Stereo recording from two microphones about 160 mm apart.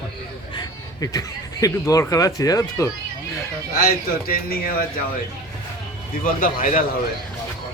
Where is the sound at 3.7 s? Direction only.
70° left (ahead or behind).